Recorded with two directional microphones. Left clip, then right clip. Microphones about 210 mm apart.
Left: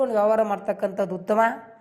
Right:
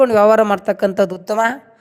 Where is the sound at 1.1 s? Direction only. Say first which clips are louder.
Right 4 dB; 40° right (ahead or behind).